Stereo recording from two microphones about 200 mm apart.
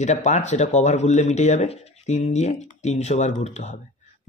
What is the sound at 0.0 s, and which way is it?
Speech, 35° left (ahead or behind).